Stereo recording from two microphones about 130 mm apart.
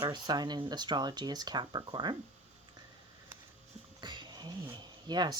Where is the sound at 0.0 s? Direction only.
35° right (ahead or behind).